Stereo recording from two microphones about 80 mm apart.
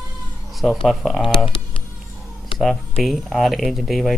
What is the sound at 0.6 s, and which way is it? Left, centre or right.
Speech, centre.